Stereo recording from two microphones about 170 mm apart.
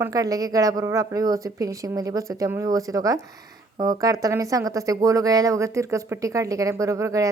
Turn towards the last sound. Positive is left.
turn(degrees=-20)  # may be behind; listen again after turning